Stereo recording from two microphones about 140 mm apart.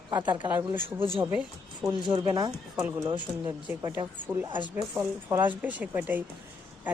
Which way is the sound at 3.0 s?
35° right (ahead or behind).